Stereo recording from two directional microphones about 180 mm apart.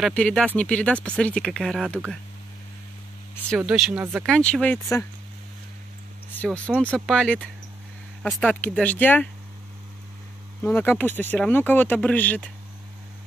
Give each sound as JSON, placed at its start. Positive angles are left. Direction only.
{"t": 0.0, "sound": "speech", "side_deg": 5}
{"t": 3.4, "sound": "speech", "side_deg": 0}
{"t": 4.0, "sound": "speech", "side_deg": -10}
{"t": 4.3, "sound": "speech", "side_deg": 5}
{"t": 6.3, "sound": "speech", "side_deg": 5}
{"t": 10.6, "sound": "speech", "side_deg": 10}